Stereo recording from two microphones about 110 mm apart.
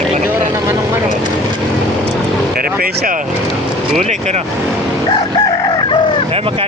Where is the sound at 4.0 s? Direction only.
90° right.